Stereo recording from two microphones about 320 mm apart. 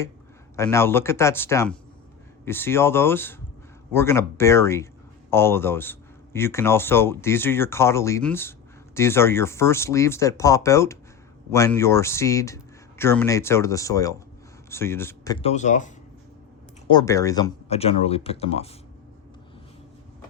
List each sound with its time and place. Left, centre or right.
0.5 s speech: centre
16.9 s speech: centre